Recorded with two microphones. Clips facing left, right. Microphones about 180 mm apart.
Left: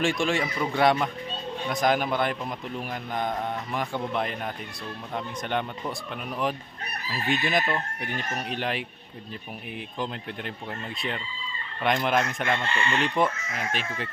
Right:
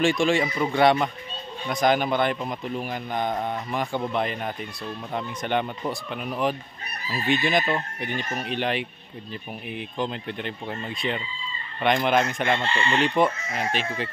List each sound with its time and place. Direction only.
0.0 s a man's voice: centre (ahead or behind)
12.4 s chicken: 30° right (ahead or behind)